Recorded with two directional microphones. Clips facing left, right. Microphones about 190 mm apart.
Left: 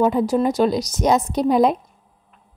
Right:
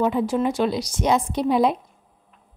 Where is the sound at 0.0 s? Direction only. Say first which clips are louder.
Left 3 dB; 40° left (ahead or behind).